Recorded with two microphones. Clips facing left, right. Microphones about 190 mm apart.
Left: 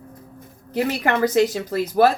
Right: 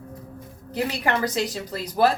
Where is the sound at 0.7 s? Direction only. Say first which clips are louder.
Left 4 dB; 50° left (ahead or behind).